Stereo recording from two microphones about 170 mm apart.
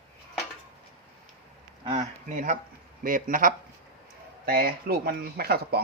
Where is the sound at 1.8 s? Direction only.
35° right (ahead or behind); by 5.8 s 65° right (ahead or behind).